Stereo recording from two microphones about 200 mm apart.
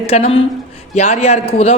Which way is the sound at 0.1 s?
30° left (ahead or behind).